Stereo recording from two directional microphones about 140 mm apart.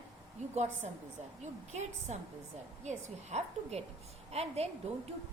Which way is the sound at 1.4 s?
55° right (ahead or behind).